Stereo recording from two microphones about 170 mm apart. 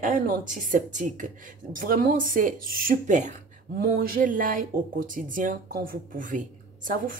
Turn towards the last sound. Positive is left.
turn(degrees=-55)  # may be behind; listen again after turning